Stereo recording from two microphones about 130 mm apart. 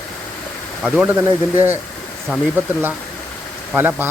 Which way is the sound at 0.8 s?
5° right (ahead or behind).